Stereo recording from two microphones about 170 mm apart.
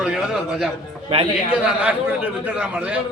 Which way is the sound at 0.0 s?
5° right (ahead or behind).